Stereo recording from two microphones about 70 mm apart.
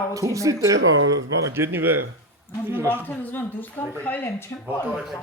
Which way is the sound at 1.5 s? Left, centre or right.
Right.